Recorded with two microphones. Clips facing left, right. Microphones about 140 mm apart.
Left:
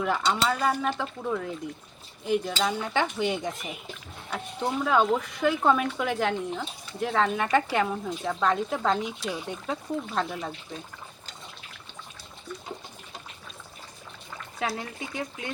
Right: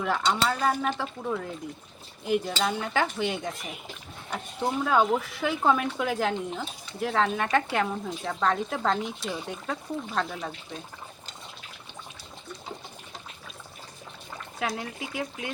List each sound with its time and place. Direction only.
0.0 s speech: centre (ahead or behind)
14.6 s speech: centre (ahead or behind)